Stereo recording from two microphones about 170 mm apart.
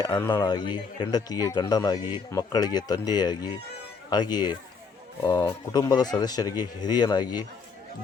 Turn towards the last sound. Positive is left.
turn(degrees=25)  # may be behind; listen again after turning